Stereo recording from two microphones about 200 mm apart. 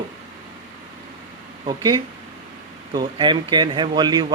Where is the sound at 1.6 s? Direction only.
20° right (ahead or behind).